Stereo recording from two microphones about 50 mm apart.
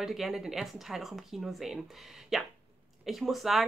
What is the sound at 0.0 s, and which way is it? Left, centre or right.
A woman's voice, centre.